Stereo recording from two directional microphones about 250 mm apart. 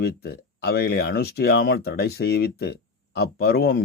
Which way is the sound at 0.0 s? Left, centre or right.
Left.